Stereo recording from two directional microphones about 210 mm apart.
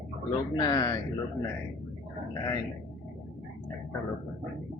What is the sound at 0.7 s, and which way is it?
Speech, 15° left (ahead or behind).